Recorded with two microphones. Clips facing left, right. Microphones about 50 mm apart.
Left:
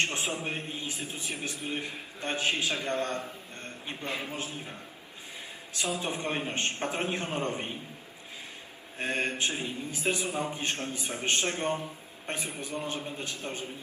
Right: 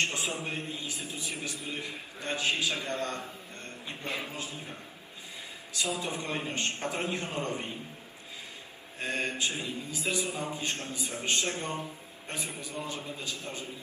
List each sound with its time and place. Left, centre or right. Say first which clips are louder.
0.0 s a man's voice: left 1 dB; left
5.7 s a man's voice: left 1 dB; left
9.0 s a man's voice: left 2 dB; left